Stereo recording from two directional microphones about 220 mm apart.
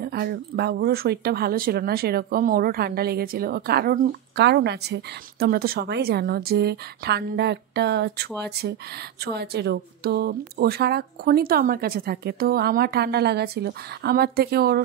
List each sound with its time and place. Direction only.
0.0 s speech: 45° right (ahead or behind)